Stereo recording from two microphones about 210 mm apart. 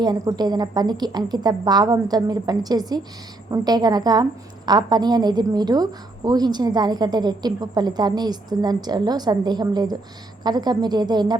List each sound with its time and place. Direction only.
0.0 s a woman's voice: 20° right (ahead or behind)